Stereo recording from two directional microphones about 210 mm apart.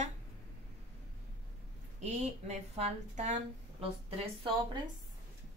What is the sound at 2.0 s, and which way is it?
A woman's voice, 30° right (ahead or behind).